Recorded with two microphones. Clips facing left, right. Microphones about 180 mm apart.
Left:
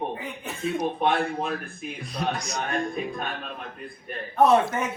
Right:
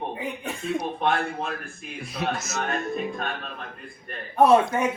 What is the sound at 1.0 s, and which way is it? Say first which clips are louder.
Speech: left 1 dB; centre (ahead or behind).